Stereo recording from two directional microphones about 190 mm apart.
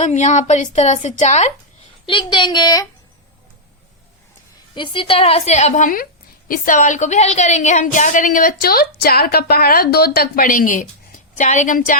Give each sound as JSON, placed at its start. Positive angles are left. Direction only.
{"t": 0.0, "sound": "a woman's voice", "side_deg": 40}
{"t": 2.0, "sound": "a woman's voice", "side_deg": 25}
{"t": 4.7, "sound": "a woman's voice", "side_deg": 25}